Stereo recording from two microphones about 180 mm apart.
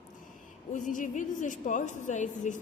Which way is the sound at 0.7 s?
45° left (ahead or behind).